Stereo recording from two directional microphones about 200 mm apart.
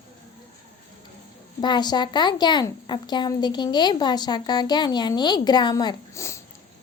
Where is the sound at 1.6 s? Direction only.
20° left (ahead or behind).